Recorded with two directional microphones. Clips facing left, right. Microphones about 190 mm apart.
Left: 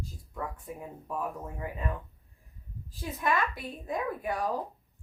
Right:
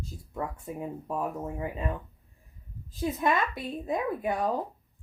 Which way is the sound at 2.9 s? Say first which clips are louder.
Right 4 dB; 20° right (ahead or behind).